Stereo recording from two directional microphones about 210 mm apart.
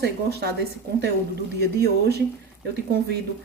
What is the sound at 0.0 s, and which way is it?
Speech, 50° right (ahead or behind).